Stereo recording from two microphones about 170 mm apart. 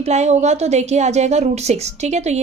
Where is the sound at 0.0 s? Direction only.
40° right (ahead or behind).